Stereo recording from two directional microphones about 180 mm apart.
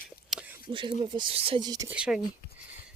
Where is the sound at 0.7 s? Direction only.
25° right (ahead or behind).